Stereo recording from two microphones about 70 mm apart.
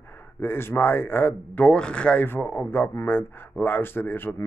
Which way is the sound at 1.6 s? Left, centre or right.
Centre.